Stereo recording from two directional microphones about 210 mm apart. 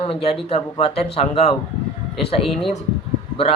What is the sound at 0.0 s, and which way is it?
Speech, 25° left (ahead or behind).